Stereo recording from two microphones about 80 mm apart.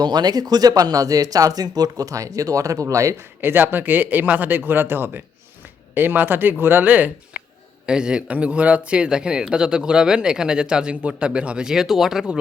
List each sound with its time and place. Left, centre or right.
0.0 s speech: right
3.2 s a man's voice: right; by 12.4 s centre